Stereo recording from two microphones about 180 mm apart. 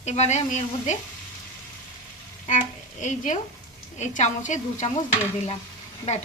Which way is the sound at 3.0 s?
45° left (ahead or behind).